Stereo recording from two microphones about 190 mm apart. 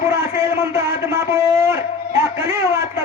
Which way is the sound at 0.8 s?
15° right (ahead or behind).